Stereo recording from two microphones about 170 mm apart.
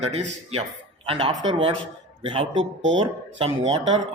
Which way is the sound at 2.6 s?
90° right.